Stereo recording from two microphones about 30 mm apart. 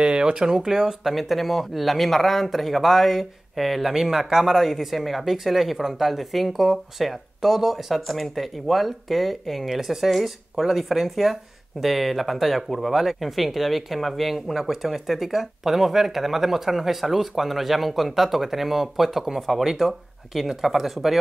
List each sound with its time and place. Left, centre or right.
0.0 s speech: right
1.1 s speech: centre
6.0 s speech: centre